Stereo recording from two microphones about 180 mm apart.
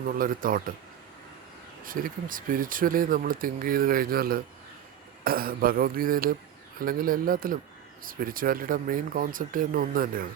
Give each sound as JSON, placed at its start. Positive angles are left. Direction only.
{"t": 0.1, "sound": "speech", "side_deg": -50}
{"t": 1.8, "sound": "speech", "side_deg": -50}